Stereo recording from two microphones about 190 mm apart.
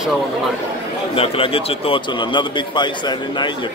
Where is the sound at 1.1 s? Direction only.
30° left (ahead or behind).